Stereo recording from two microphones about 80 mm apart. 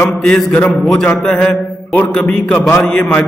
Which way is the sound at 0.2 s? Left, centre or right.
Centre.